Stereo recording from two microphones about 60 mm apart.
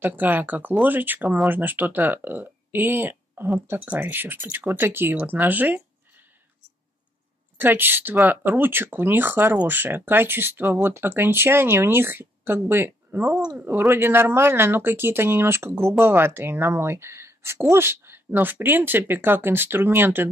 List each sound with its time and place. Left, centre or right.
0.0 s speech: right
7.5 s speech: right